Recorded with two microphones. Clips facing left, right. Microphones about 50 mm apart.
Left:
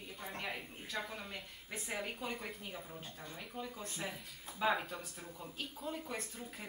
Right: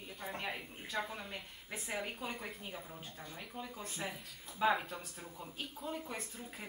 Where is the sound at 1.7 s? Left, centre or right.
Centre.